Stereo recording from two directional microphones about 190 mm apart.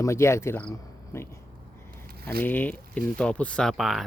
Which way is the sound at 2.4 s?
10° left (ahead or behind).